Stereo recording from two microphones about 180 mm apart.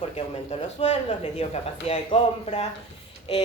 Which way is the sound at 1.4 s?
35° left (ahead or behind).